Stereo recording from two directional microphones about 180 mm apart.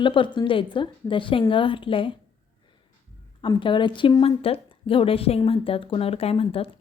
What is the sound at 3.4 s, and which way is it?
A woman's voice, 25° left (ahead or behind).